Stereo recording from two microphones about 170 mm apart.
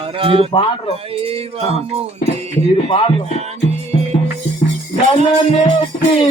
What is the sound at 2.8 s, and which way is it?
Speech, 30° left (ahead or behind).